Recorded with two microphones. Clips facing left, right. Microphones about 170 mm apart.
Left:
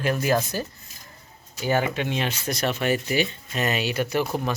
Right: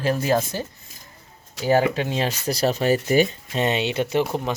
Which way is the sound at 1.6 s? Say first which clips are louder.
Right 4 dB; 35° right (ahead or behind).